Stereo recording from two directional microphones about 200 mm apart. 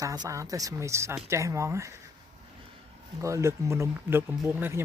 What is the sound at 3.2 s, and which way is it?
Speech, 15° right (ahead or behind).